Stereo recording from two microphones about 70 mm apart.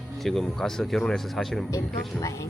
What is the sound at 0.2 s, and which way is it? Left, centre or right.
Speech, centre.